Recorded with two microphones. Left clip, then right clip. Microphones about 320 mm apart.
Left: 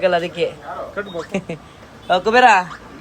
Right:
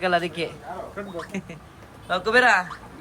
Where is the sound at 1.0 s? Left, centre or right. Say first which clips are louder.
Left 8 dB; left.